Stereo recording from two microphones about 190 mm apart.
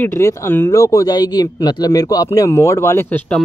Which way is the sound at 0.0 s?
15° left (ahead or behind).